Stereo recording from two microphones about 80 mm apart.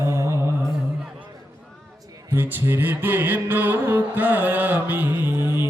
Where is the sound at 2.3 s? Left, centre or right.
Right.